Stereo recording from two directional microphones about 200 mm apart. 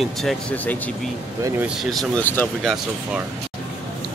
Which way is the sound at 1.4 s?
15° right (ahead or behind).